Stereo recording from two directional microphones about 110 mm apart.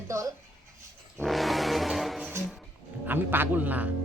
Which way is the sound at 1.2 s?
Centre (ahead or behind).